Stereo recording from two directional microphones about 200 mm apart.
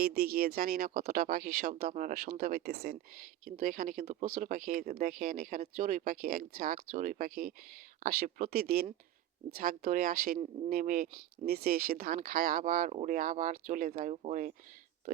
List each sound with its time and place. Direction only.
0.0 s speech: 50° right (ahead or behind)